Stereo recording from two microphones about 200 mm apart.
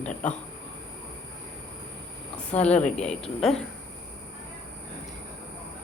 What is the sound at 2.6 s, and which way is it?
Speech, 5° left (ahead or behind).